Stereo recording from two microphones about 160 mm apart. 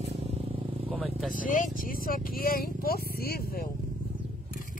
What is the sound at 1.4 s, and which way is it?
Speech, 55° left (ahead or behind).